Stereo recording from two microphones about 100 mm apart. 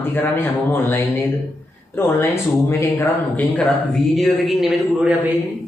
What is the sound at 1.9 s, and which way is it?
Speech, 20° left (ahead or behind).